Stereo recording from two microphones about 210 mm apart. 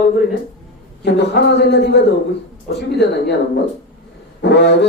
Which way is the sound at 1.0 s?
55° left (ahead or behind).